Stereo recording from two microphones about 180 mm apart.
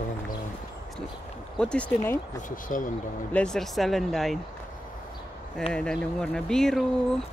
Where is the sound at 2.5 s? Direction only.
50° left (ahead or behind).